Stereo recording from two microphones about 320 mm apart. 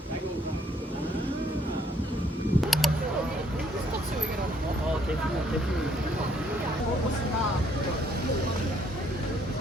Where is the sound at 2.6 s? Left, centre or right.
Centre.